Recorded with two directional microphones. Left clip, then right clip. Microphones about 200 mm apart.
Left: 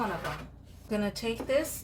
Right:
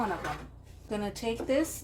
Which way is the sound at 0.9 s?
20° right (ahead or behind).